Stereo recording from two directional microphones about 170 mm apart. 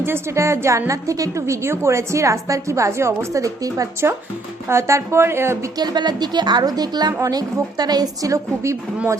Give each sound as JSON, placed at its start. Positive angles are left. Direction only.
{"t": 0.0, "sound": "a woman's voice", "side_deg": -15}